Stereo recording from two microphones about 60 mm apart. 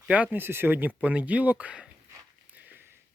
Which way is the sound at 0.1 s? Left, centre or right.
Right.